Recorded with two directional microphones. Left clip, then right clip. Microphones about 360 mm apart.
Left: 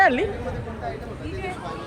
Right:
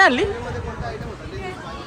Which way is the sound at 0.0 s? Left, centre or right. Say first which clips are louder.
Right 3 dB; centre.